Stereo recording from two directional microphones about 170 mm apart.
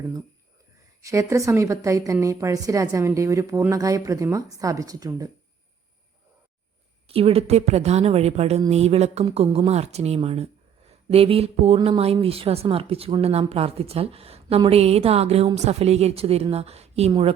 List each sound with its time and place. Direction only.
1.0 s a woman's voice: 20° right (ahead or behind)
7.1 s speech: 35° right (ahead or behind)